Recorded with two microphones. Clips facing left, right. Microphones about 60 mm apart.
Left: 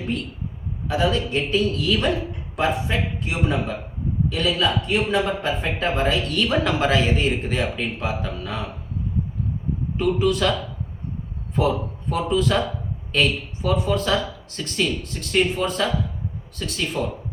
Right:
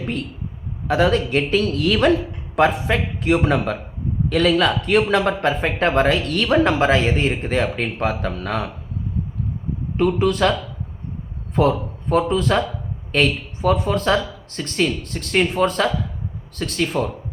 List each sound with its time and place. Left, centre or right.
0.9 s speech: right
10.0 s a man's voice: right
11.5 s a man's voice: right